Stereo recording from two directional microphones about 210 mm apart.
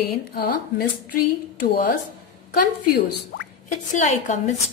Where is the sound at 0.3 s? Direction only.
45° left (ahead or behind).